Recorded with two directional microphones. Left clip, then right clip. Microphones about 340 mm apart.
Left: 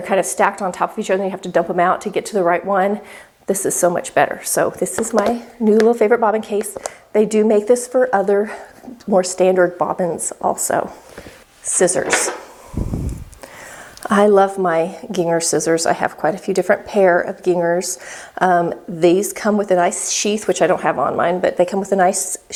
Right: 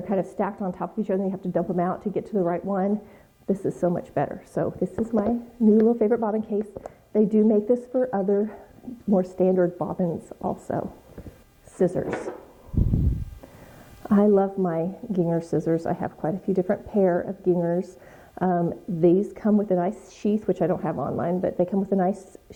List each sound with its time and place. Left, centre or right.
0.0 s a woman's voice: centre
14.0 s a woman's voice: centre